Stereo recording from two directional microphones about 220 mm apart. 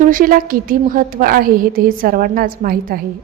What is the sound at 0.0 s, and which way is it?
A woman's voice, 40° right (ahead or behind).